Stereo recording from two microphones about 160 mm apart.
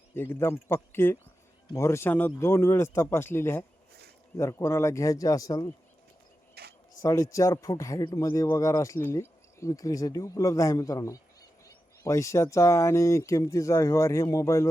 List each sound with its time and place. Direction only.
0.1 s a man's voice: 15° left (ahead or behind)
6.5 s a sound: 85° right
7.0 s a man's voice: 20° left (ahead or behind)